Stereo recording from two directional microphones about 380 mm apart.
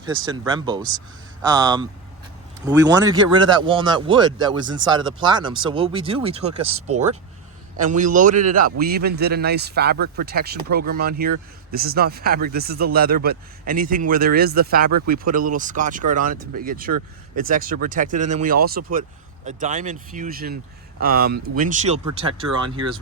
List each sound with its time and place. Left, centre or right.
0.0 s speech: centre
6.7 s speech: right
7.9 s speech: centre
16.4 s speech: right
16.6 s speech: right